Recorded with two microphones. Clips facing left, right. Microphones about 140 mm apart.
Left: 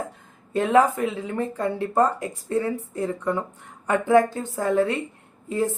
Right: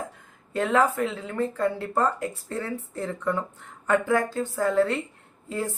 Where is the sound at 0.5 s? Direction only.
15° left (ahead or behind).